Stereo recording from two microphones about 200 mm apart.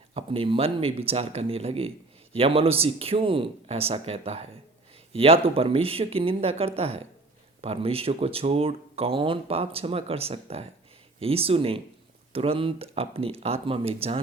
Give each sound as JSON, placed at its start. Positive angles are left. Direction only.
{"t": 0.1, "sound": "speech", "side_deg": -30}